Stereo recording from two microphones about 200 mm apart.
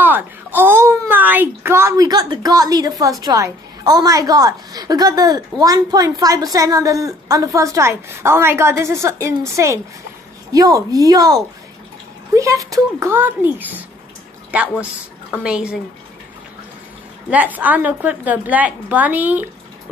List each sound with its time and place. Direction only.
0.0 s speech: 10° right (ahead or behind)
12.4 s speech: 15° right (ahead or behind)
15.4 s speech: 5° right (ahead or behind)
17.3 s speech: 10° right (ahead or behind)